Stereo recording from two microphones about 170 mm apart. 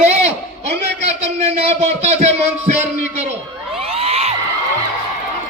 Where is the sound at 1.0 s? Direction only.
40° right (ahead or behind).